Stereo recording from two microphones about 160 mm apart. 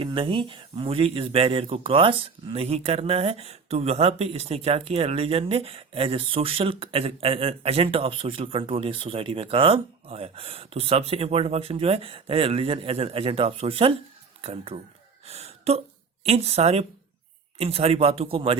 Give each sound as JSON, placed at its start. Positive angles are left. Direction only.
{"t": 0.0, "sound": "speech", "side_deg": -30}
{"t": 15.3, "sound": "gasp", "side_deg": -40}
{"t": 16.2, "sound": "speech", "side_deg": -40}